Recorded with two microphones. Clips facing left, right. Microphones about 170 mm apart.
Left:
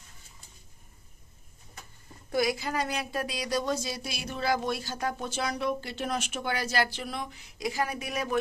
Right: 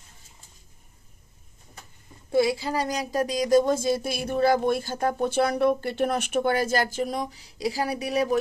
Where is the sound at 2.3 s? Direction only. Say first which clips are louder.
Right 5 dB; 30° right (ahead or behind).